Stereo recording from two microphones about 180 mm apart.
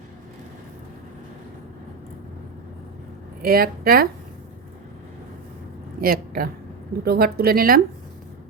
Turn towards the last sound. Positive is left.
turn(degrees=-55)  # may be behind; listen again after turning